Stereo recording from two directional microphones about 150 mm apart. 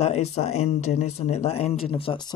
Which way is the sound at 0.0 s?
45° left (ahead or behind).